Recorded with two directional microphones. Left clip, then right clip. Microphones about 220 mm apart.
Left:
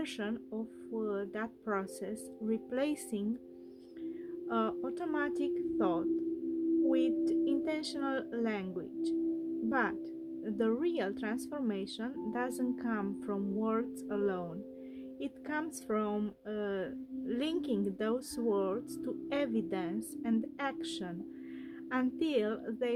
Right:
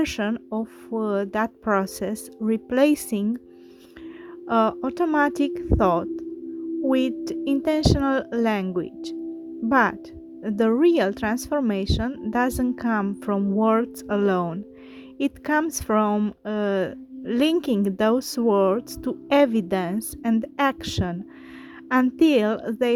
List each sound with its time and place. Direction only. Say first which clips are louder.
0.0 s a woman's voice: right 13 dB; 35° right (ahead or behind)
4.4 s a woman's voice: right 13 dB; 35° right (ahead or behind)